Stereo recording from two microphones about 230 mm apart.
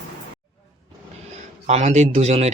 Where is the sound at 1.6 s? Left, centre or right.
Right.